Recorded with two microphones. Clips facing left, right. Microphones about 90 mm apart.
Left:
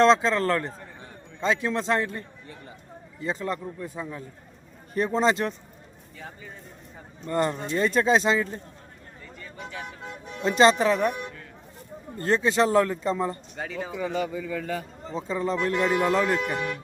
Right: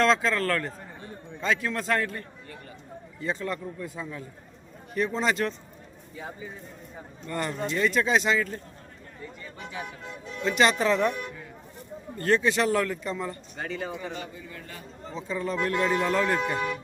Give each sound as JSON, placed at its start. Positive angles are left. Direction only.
{"t": 0.0, "sound": "a man's voice", "side_deg": 25}
{"t": 4.9, "sound": "speech", "side_deg": 35}
{"t": 6.1, "sound": "speech", "side_deg": -15}
{"t": 7.3, "sound": "speech", "side_deg": 30}
{"t": 9.2, "sound": "vehicle", "side_deg": -15}
{"t": 10.4, "sound": "a man's voice", "side_deg": 30}
{"t": 10.8, "sound": "speech", "side_deg": 15}
{"t": 12.1, "sound": "a man's voice", "side_deg": 25}
{"t": 13.6, "sound": "speech", "side_deg": 0}
{"t": 15.1, "sound": "a man's voice", "side_deg": 30}